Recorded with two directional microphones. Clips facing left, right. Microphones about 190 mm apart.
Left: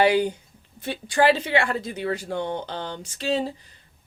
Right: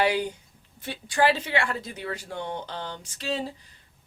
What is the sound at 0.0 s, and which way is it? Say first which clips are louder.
Speech: left 5 dB; 25° left (ahead or behind).